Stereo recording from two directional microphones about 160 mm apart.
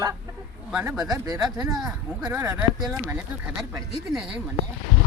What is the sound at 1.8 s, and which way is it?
Speech, 5° right (ahead or behind).